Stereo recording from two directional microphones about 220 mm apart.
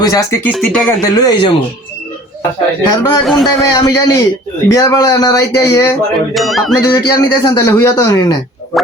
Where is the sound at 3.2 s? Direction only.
Centre (ahead or behind).